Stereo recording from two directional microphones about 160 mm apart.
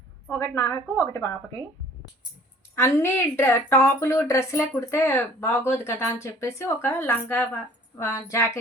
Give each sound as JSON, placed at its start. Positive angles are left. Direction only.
{"t": 0.3, "sound": "a woman's voice", "side_deg": 15}
{"t": 2.7, "sound": "a woman's voice", "side_deg": 15}